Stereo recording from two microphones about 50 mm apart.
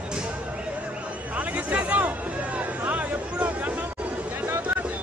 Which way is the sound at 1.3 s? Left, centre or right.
Right.